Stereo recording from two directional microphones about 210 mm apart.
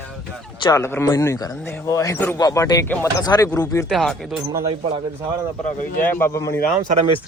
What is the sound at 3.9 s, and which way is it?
Speech, centre (ahead or behind).